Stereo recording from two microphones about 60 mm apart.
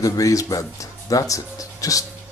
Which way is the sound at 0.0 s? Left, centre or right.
Left.